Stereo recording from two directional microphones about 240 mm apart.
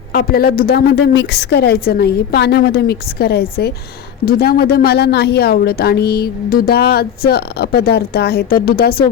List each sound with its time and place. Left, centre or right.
0.1 s a woman's voice: left